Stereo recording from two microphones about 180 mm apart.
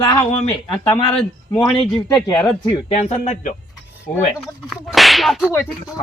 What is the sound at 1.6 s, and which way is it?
Whip, 5° left (ahead or behind).